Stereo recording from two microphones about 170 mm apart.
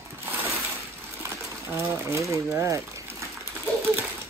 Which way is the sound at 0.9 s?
15° right (ahead or behind).